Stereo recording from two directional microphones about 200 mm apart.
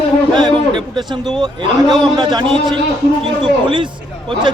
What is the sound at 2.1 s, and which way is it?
A man's voice, 25° right (ahead or behind).